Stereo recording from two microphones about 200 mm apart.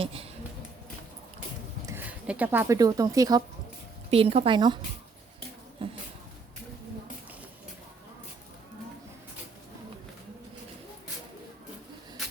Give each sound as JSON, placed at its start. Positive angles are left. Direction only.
{"t": 0.0, "sound": "speech", "side_deg": -30}
{"t": 1.9, "sound": "speech", "side_deg": -10}
{"t": 4.1, "sound": "a woman's voice", "side_deg": -30}
{"t": 5.8, "sound": "a sound", "side_deg": -25}